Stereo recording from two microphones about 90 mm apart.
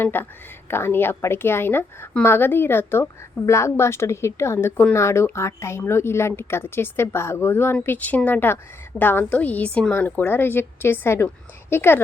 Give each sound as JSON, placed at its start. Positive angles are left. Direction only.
{"t": 0.0, "sound": "a woman's voice", "side_deg": 25}